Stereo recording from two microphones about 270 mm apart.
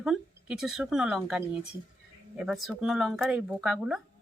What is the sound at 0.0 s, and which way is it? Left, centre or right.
Speech, centre.